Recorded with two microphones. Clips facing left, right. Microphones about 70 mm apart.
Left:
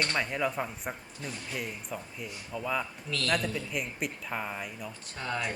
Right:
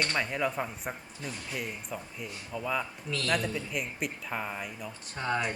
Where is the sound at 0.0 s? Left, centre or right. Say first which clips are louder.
Even; centre.